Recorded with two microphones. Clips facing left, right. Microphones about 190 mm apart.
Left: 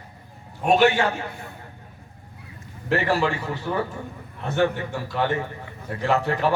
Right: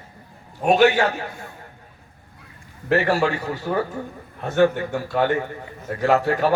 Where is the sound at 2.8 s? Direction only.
40° right (ahead or behind).